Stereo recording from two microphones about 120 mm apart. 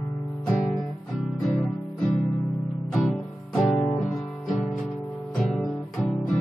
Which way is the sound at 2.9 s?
Centre (ahead or behind).